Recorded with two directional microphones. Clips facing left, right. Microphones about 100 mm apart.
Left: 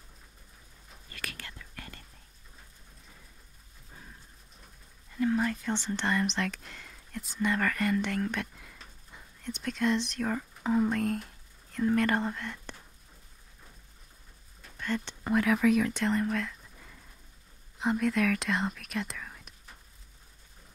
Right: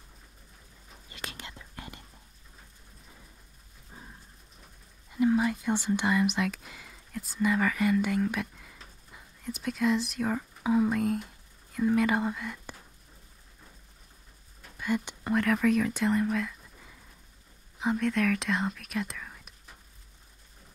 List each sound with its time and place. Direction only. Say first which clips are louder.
1.1 s whispering: right 1 dB; 20° right (ahead or behind)
3.9 s dog: right 2 dB; 20° right (ahead or behind)
5.1 s speech: right 3 dB; 15° right (ahead or behind)
14.8 s speech: right 3 dB; 10° right (ahead or behind)
15.2 s speech: left 1 dB; centre (ahead or behind)